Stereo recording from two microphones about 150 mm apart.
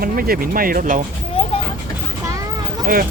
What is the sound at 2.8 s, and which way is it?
Speech, 70° right (ahead or behind).